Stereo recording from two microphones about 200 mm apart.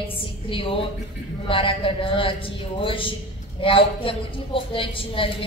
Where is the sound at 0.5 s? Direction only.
25° left (ahead or behind).